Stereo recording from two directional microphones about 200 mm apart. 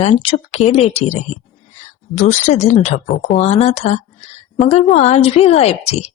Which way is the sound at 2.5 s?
35° left (ahead or behind).